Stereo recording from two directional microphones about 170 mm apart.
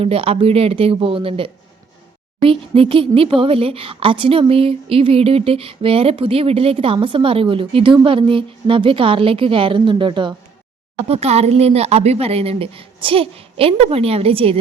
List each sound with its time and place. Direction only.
0.0 s speech: 35° right (ahead or behind)